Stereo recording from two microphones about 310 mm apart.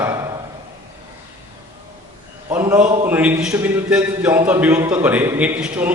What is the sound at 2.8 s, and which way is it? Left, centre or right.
Speech, right.